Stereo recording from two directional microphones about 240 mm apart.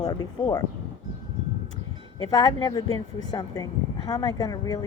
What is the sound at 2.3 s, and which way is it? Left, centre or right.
A woman's voice, centre.